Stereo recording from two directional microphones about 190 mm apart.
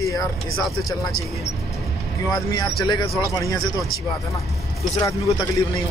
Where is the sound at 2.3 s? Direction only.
20° left (ahead or behind).